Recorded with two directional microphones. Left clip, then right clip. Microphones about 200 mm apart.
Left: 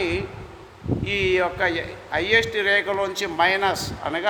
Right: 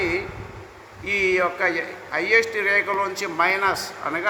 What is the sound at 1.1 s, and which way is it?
A man's voice, 50° left (ahead or behind).